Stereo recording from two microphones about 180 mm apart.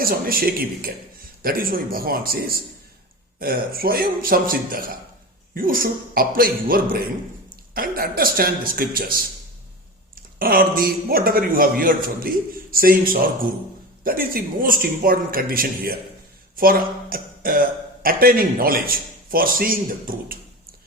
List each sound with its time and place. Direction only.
0.0 s a man's voice: 55° right (ahead or behind)
10.3 s speech: 55° right (ahead or behind)